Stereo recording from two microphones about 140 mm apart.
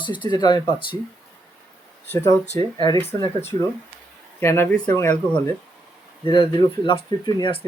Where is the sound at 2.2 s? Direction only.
25° left (ahead or behind).